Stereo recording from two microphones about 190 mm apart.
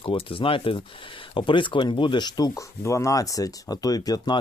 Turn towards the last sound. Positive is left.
turn(degrees=20)  # may be behind; listen again after turning